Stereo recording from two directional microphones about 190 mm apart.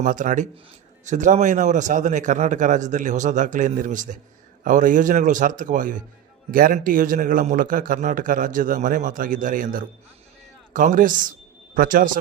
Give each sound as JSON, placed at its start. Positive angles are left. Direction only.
{"t": 0.0, "sound": "a man's voice", "side_deg": -45}